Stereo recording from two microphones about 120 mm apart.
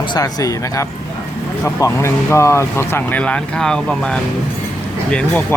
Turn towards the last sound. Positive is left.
turn(degrees=10)  # may be behind; listen again after turning